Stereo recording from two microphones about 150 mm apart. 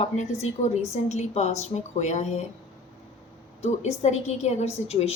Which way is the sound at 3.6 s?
45° left (ahead or behind).